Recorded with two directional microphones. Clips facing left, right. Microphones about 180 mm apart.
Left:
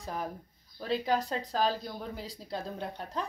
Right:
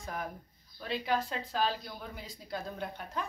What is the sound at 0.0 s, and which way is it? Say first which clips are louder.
Speech: left 2 dB; 35° left (ahead or behind).